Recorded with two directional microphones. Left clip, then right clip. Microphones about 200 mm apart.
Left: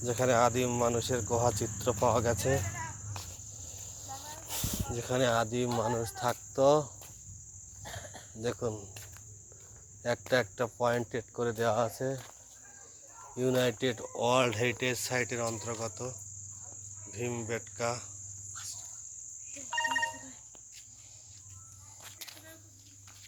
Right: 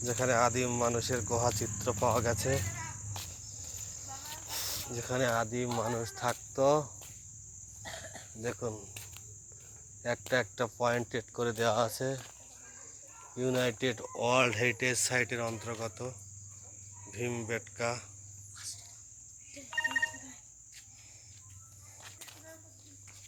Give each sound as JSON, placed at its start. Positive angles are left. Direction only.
{"t": 0.0, "sound": "speech", "side_deg": 15}
{"t": 3.5, "sound": "cricket", "side_deg": 15}
{"t": 4.4, "sound": "speech", "side_deg": 15}
{"t": 8.4, "sound": "speech", "side_deg": 15}
{"t": 10.0, "sound": "speech", "side_deg": 15}
{"t": 13.3, "sound": "speech", "side_deg": 15}
{"t": 19.7, "sound": "cricket", "side_deg": 20}
{"t": 22.0, "sound": "a sound", "side_deg": 0}